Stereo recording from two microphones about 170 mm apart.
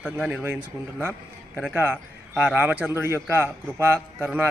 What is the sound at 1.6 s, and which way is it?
A man's voice, 10° right (ahead or behind).